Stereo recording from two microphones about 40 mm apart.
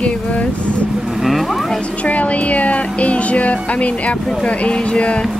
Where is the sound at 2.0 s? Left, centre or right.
Left.